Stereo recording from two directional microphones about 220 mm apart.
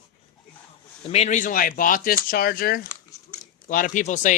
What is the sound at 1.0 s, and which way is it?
Speech, 30° left (ahead or behind).